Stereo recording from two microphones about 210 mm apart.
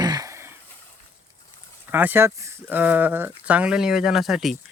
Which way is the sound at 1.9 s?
10° right (ahead or behind).